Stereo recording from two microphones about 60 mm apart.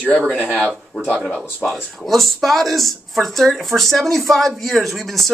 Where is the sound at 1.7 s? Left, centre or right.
Centre.